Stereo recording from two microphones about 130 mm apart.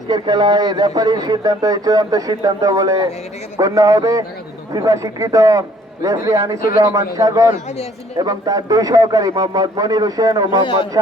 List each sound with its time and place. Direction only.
0.1 s a man's voice: 35° right (ahead or behind)